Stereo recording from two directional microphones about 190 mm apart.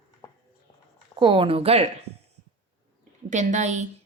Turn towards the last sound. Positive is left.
turn(degrees=-40)  # may be behind; listen again after turning